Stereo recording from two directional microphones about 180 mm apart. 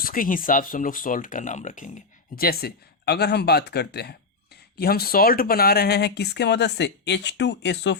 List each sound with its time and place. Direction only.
0.0 s speech: 50° left (ahead or behind); by 7.9 s 75° left (ahead or behind)